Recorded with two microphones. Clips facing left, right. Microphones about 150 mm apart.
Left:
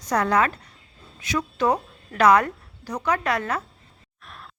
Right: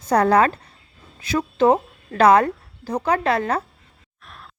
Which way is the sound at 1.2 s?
30° right (ahead or behind).